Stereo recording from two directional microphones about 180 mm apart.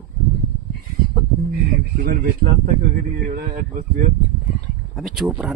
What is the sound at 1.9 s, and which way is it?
Speech, 55° right (ahead or behind).